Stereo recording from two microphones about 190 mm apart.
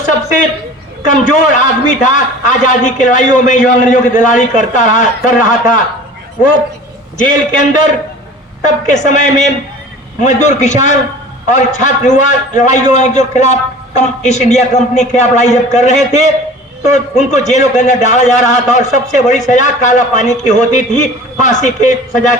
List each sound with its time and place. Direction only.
1.0 s a man's voice: 40° left (ahead or behind)
7.2 s a man's voice: 45° left (ahead or behind)